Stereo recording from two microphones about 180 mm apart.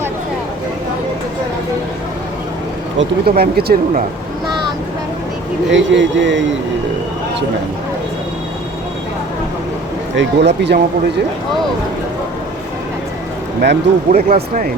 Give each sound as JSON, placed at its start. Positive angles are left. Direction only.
{"t": 3.0, "sound": "speech", "side_deg": -60}
{"t": 5.7, "sound": "speech", "side_deg": -90}
{"t": 10.2, "sound": "speech", "side_deg": -70}
{"t": 13.6, "sound": "speech", "side_deg": -60}
{"t": 14.3, "sound": "speech", "side_deg": -45}